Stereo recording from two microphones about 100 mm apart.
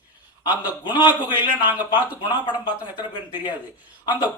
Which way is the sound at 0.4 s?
15° right (ahead or behind).